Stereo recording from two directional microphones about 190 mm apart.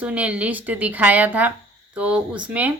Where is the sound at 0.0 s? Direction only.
5° right (ahead or behind).